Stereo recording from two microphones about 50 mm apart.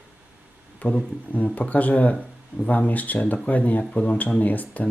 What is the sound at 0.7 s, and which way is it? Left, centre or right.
Speech, left.